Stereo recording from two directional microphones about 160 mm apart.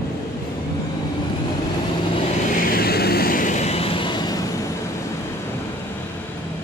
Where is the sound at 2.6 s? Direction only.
70° left (ahead or behind); by 4.4 s 25° left (ahead or behind).